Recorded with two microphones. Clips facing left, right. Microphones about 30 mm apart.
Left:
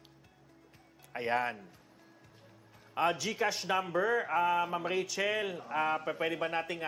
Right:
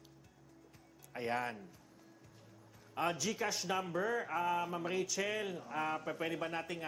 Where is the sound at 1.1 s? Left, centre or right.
Left.